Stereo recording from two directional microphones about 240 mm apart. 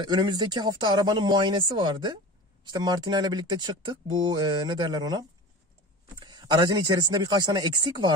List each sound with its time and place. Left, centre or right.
0.0 s speech: centre